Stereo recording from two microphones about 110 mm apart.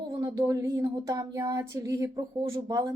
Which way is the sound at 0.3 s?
30° right (ahead or behind).